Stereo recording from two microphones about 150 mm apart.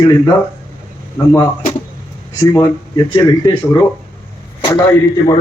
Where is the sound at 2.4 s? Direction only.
25° left (ahead or behind).